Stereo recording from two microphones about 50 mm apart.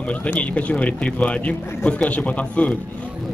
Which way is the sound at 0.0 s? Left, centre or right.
Left.